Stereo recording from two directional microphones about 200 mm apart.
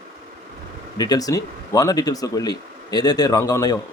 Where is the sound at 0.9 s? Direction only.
20° left (ahead or behind).